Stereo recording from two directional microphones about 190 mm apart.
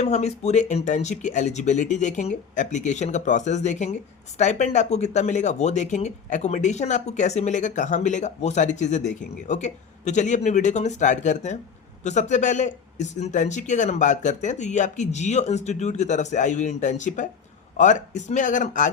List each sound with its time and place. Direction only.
0.0 s speech: 35° left (ahead or behind)